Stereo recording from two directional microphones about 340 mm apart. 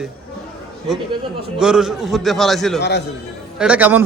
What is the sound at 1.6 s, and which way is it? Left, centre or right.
A man's voice, centre.